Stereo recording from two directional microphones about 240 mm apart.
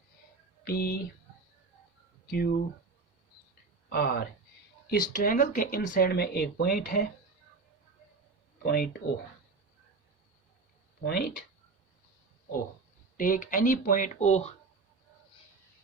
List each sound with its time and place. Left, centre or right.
0.6 s speech: left
2.3 s speech: left
3.8 s speech: left
8.6 s speech: left
11.0 s speech: left
13.1 s speech: left